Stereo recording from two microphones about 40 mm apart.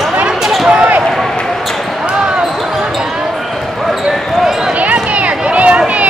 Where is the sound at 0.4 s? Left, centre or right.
Centre.